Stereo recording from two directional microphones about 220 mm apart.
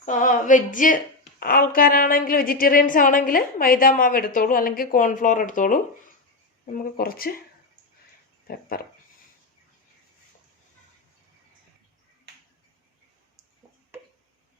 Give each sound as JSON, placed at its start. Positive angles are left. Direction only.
{"t": 0.0, "sound": "a woman's voice", "side_deg": 35}
{"t": 8.7, "sound": "a woman's voice", "side_deg": 40}